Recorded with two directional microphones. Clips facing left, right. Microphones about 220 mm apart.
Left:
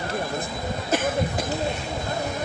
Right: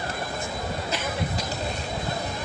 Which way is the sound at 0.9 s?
50° left (ahead or behind).